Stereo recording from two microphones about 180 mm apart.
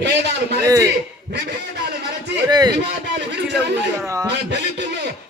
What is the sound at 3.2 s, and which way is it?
Speech, 70° right (ahead or behind).